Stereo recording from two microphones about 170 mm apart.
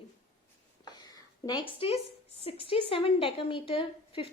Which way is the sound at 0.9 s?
25° left (ahead or behind).